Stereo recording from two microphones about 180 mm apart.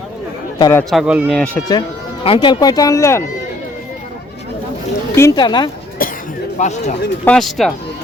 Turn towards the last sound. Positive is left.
turn(degrees=0)  # may be behind; listen again after turning